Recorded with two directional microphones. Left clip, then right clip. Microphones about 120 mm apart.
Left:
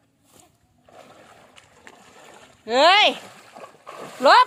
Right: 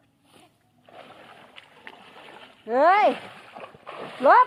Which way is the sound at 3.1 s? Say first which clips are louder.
Even; 30° left (ahead or behind).